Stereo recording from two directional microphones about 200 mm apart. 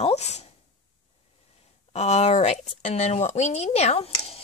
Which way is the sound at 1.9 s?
30° left (ahead or behind).